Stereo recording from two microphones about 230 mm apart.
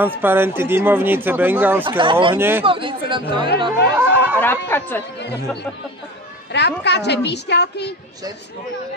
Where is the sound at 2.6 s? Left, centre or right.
Right.